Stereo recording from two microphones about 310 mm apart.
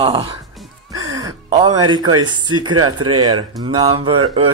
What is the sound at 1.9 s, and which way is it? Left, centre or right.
Speech, centre.